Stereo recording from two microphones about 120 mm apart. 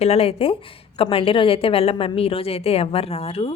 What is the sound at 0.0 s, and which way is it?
A woman's voice, 55° left (ahead or behind).